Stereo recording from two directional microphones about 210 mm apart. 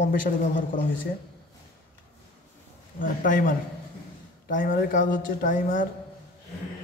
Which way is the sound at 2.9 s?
40° left (ahead or behind).